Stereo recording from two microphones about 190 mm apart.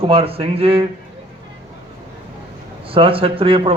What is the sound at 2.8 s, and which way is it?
Speech, 30° right (ahead or behind).